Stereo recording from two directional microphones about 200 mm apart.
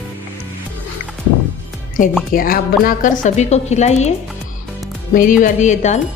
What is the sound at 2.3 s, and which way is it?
A woman's voice, 45° left (ahead or behind).